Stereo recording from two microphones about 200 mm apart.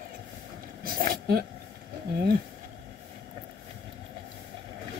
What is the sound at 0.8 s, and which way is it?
Vehicle, 50° right (ahead or behind).